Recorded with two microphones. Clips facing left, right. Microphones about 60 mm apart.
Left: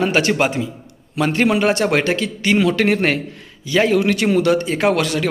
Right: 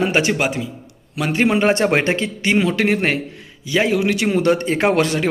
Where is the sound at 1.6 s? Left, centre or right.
Right.